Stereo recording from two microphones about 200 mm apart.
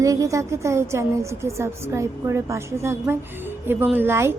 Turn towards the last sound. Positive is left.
turn(degrees=-10)  # may be behind; listen again after turning